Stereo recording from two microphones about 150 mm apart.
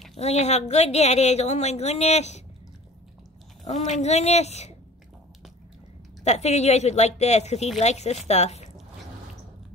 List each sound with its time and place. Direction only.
0.2 s speech: 45° left (ahead or behind)
3.6 s speech: 50° left (ahead or behind)
6.2 s speech: 50° left (ahead or behind)